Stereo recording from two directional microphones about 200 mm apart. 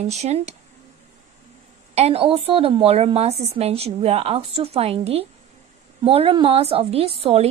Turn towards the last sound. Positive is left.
turn(degrees=-30)  # may be behind; listen again after turning